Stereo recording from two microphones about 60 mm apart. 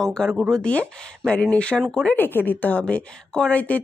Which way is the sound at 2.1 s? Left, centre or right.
Left.